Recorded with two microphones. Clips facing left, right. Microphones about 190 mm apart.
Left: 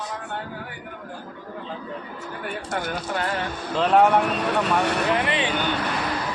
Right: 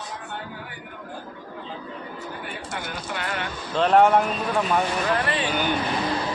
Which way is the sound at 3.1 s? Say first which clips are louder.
Left 4 dB; 35° left (ahead or behind).